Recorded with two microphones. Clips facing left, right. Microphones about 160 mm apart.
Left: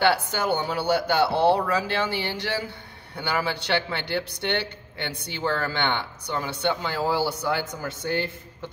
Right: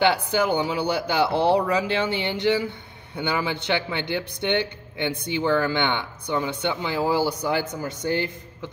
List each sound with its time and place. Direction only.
0.0 s a man's voice: 15° right (ahead or behind)